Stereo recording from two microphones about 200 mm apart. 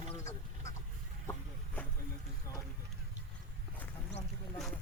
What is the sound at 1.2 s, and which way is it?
Vehicle, 15° left (ahead or behind).